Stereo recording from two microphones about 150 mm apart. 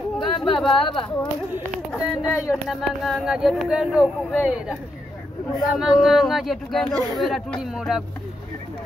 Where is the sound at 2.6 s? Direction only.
Centre (ahead or behind).